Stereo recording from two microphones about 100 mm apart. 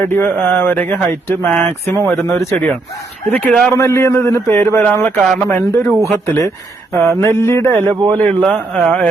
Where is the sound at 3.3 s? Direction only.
15° left (ahead or behind).